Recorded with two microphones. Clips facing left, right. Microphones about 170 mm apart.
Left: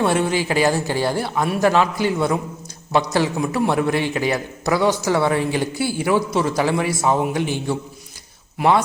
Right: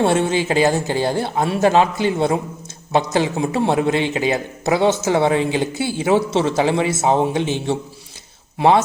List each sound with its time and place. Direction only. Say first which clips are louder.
0.0 s a man's voice: right 2 dB; 25° right (ahead or behind)